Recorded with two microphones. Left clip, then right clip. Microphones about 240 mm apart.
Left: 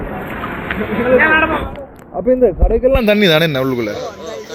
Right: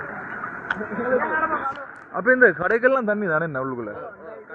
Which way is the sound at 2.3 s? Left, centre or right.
Right.